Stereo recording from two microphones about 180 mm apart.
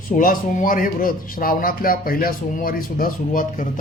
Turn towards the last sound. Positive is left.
turn(degrees=45)  # may be behind; listen again after turning